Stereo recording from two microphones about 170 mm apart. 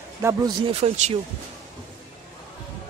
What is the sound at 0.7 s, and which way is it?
Speech, 40° right (ahead or behind).